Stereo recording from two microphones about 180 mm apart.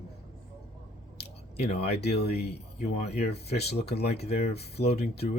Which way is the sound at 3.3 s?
65° left (ahead or behind).